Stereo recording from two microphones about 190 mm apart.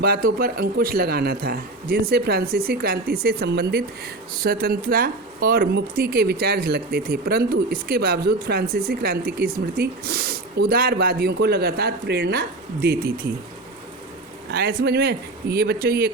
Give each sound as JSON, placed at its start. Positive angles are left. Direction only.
{"t": 0.0, "sound": "speech", "side_deg": -50}
{"t": 14.5, "sound": "speech", "side_deg": -55}